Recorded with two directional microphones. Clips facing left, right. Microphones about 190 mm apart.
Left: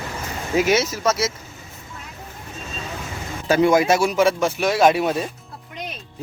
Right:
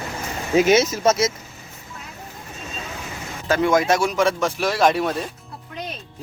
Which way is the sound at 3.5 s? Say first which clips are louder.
Left 2 dB; 10° left (ahead or behind).